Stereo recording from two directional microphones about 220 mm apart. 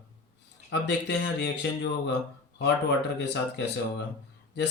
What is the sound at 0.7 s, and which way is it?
Speech, 50° left (ahead or behind).